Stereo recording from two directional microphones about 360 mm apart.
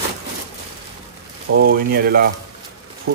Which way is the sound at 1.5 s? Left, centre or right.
Right.